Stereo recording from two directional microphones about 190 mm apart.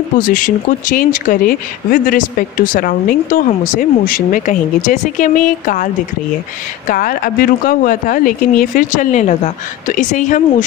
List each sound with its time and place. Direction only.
0.3 s speech: 45° left (ahead or behind)
6.9 s speech: 45° left (ahead or behind)